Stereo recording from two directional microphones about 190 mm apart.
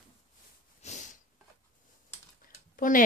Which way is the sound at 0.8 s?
40° left (ahead or behind).